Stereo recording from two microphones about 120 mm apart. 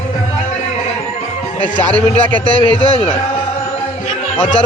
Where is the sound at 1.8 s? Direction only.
10° left (ahead or behind).